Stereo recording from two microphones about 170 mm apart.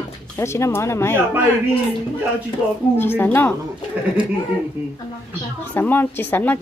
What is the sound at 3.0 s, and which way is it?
Speech, 10° left (ahead or behind).